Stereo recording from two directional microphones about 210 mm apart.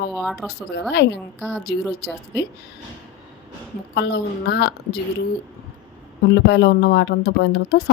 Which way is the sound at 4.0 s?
55° left (ahead or behind).